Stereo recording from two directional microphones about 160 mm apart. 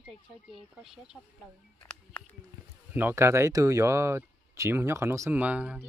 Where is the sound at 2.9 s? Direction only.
15° right (ahead or behind).